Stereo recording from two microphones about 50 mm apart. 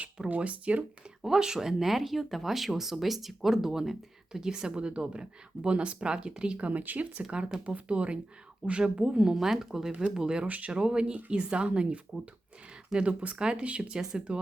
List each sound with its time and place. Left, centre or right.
0.3 s speech: right
1.2 s speech: centre
9.3 s speech: centre
10.4 s speech: right
10.7 s speech: centre
13.9 s speech: centre
14.2 s speech: right